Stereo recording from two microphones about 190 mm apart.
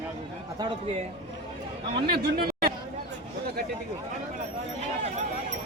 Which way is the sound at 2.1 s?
55° right (ahead or behind).